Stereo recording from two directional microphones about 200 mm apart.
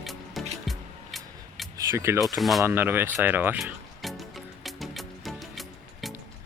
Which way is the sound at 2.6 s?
10° right (ahead or behind).